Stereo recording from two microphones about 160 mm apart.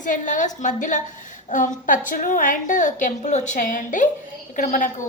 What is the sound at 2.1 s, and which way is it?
A woman's voice, 55° left (ahead or behind).